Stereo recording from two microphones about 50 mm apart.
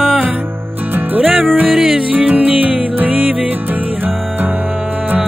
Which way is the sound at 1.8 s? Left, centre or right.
Centre.